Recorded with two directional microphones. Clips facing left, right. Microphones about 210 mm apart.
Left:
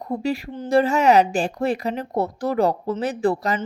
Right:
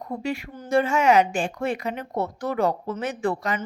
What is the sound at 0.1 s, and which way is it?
Speech, 35° left (ahead or behind).